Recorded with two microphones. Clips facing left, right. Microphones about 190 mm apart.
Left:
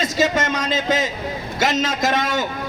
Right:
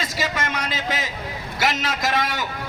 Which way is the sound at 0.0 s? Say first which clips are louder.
Left 7 dB; 25° left (ahead or behind).